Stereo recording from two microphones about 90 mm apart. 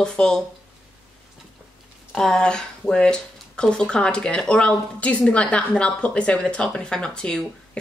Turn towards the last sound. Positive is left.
turn(degrees=10)  # may be behind; listen again after turning